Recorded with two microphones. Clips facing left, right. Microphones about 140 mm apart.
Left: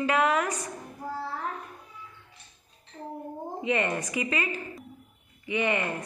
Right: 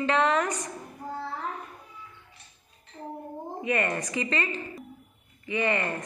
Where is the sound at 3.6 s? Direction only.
15° left (ahead or behind).